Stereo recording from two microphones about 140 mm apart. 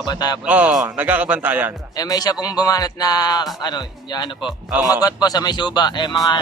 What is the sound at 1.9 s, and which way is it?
A man's voice, 25° left (ahead or behind).